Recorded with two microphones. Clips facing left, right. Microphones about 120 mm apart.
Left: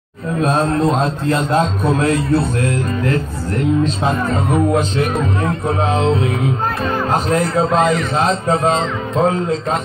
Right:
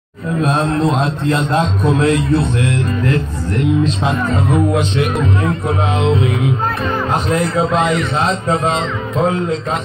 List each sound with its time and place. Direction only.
0.4 s a man's voice: centre (ahead or behind)
1.5 s speech: 40° left (ahead or behind)